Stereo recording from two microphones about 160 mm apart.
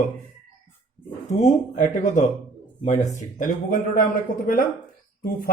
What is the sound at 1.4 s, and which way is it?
Speech, 50° left (ahead or behind).